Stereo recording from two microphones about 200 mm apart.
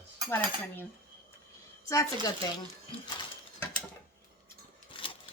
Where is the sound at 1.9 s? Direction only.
15° left (ahead or behind).